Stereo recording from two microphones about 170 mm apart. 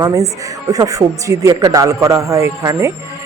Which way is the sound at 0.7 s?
20° right (ahead or behind).